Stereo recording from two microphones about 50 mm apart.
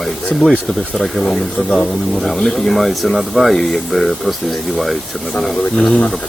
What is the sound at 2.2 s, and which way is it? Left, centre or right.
Speech, centre.